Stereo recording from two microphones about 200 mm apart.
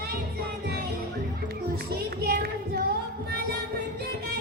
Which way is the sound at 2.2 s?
50° right (ahead or behind).